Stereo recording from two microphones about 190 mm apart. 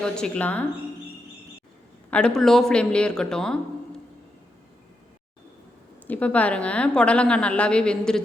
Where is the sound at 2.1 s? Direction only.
5° left (ahead or behind).